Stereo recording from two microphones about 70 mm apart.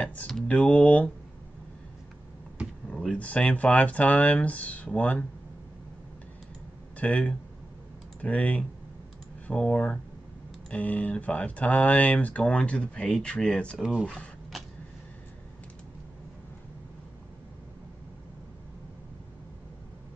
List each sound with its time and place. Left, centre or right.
0.0 s typing: left
0.5 s speech: left
2.9 s speech: centre
7.0 s speech: centre
14.5 s vehicle: centre